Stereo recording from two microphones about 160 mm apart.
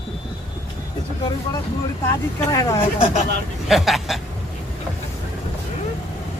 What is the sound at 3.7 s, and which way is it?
Speech, centre (ahead or behind).